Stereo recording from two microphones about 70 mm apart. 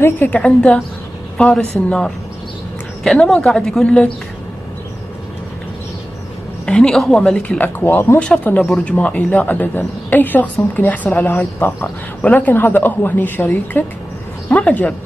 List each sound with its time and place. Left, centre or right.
0.0 s speech: left
0.4 s a woman's voice: centre
3.3 s a woman's voice: centre
6.6 s a woman's voice: centre
7.4 s speech: left
7.8 s speech: left
8.6 s speech: centre